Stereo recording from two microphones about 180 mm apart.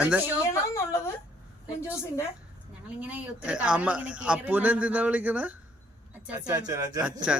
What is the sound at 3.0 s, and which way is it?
A man's voice, 10° right (ahead or behind).